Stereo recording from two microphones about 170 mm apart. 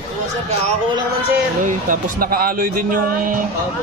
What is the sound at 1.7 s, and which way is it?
Speech, 50° right (ahead or behind).